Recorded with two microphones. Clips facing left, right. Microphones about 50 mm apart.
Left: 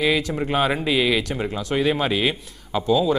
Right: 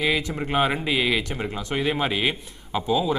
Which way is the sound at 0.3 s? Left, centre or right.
Centre.